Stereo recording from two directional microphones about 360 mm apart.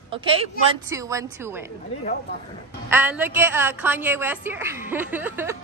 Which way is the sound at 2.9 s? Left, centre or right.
Centre.